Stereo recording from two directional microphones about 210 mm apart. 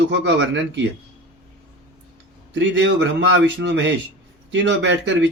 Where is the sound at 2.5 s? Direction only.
60° right (ahead or behind).